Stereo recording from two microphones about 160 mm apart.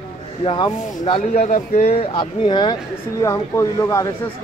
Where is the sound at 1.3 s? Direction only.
45° left (ahead or behind).